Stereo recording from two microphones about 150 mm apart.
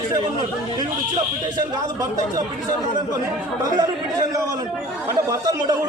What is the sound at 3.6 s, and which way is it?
Speech, 25° right (ahead or behind).